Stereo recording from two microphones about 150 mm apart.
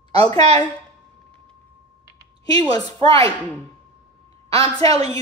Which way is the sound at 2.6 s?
25° left (ahead or behind).